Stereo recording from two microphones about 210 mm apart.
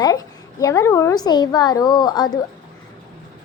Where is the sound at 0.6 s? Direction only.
15° left (ahead or behind).